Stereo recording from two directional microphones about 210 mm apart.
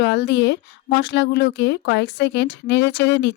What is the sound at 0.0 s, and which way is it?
Speech, 50° left (ahead or behind).